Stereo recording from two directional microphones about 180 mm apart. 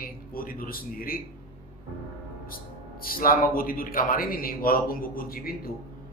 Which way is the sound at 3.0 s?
55° left (ahead or behind).